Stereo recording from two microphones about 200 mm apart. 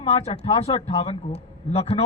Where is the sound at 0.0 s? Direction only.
30° left (ahead or behind).